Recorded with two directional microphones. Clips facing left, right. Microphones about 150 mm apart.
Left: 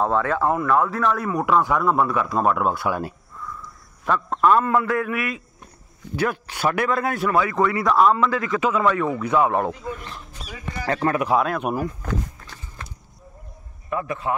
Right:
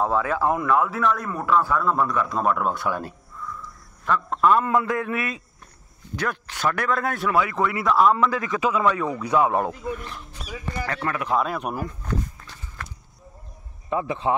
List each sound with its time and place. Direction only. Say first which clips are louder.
0.0 s a man's voice: left 1 dB; 10° right (ahead or behind)
0.7 s a man's voice: left 1 dB; 5° right (ahead or behind)
4.3 s a man's voice: left 1 dB; centre (ahead or behind)
4.6 s a man's voice: left 2 dB; 20° right (ahead or behind)
6.1 s a man's voice: left 4 dB; 10° left (ahead or behind)
6.9 s a man's voice: left 2 dB; centre (ahead or behind)
8.1 s a man's voice: left 1 dB; 15° right (ahead or behind)
10.9 s speech: left 8 dB; 25° left (ahead or behind)
11.2 s a man's voice: left 3 dB; centre (ahead or behind)
13.8 s a man's voice: right 2 dB; 20° right (ahead or behind)